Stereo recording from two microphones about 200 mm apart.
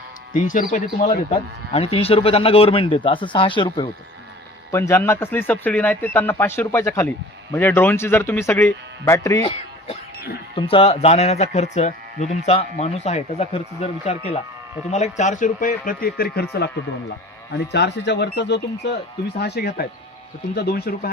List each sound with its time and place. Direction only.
0.3 s speech: 40° left (ahead or behind)
1.3 s speech: 30° left (ahead or behind)
4.7 s a man's voice: 10° left (ahead or behind)
9.4 s speech: 30° left (ahead or behind)
10.2 s sheep: 50° left (ahead or behind)
10.5 s speech: 25° left (ahead or behind); by 21.1 s 50° left (ahead or behind)